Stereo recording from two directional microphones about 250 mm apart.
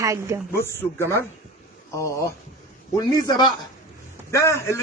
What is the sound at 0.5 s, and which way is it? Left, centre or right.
A man's voice, centre.